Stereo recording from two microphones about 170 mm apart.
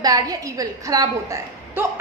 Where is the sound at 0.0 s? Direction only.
20° right (ahead or behind).